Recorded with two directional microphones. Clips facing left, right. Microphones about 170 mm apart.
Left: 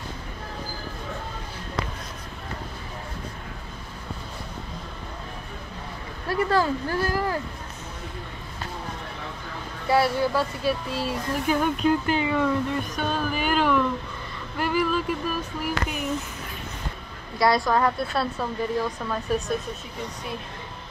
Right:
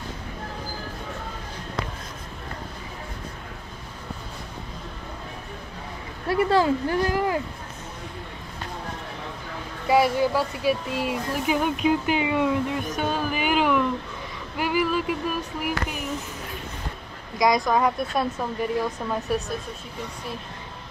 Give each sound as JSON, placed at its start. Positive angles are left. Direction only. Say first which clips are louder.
{"t": 6.2, "sound": "speech", "louder": "right 3 dB", "side_deg": -25}
{"t": 9.8, "sound": "speech", "louder": "right 2 dB", "side_deg": -15}
{"t": 17.4, "sound": "speech", "louder": "even", "side_deg": -15}